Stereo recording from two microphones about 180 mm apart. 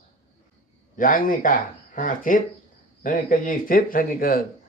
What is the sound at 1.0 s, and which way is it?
Speech, 50° left (ahead or behind).